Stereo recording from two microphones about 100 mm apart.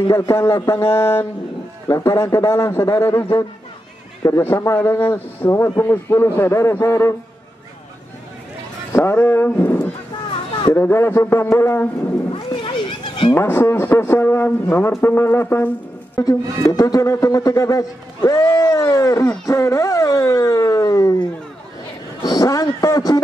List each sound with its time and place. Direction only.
0.1 s a man's voice: 30° left (ahead or behind)
8.9 s a man's voice: 25° left (ahead or behind)
12.3 s a sound: 60° left (ahead or behind)
13.3 s a man's voice: 20° left (ahead or behind)
16.2 s speech: 35° left (ahead or behind)